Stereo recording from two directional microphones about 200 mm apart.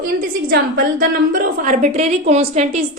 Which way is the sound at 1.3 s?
40° right (ahead or behind).